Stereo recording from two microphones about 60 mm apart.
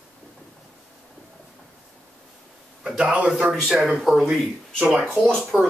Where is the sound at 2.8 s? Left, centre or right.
Centre.